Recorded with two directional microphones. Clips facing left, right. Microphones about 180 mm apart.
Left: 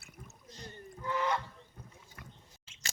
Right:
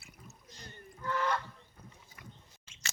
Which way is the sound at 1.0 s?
15° left (ahead or behind).